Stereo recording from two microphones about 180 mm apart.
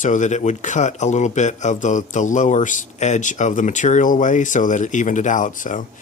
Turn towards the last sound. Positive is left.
turn(degrees=45)  # may be behind; listen again after turning